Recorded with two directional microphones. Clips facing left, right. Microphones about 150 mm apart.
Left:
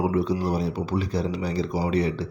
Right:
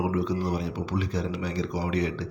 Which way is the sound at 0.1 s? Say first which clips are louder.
Left 3 dB; 35° left (ahead or behind).